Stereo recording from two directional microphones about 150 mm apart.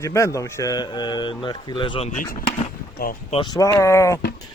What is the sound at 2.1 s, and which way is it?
Speech, 65° left (ahead or behind).